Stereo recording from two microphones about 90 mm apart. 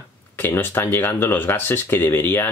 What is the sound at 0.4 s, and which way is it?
Speech, 20° left (ahead or behind).